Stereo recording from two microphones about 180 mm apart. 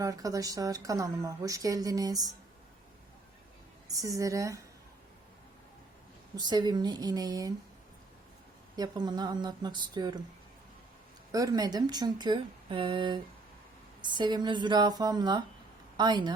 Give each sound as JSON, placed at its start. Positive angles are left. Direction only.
{"t": 0.0, "sound": "a woman's voice", "side_deg": -20}
{"t": 3.8, "sound": "a woman's voice", "side_deg": -20}
{"t": 6.3, "sound": "a woman's voice", "side_deg": -25}
{"t": 8.7, "sound": "a woman's voice", "side_deg": -25}
{"t": 11.3, "sound": "a woman's voice", "side_deg": -20}